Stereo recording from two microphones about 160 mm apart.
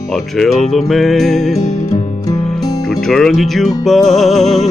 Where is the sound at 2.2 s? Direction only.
25° left (ahead or behind).